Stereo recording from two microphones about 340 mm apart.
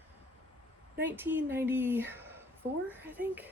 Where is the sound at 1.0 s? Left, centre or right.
Centre.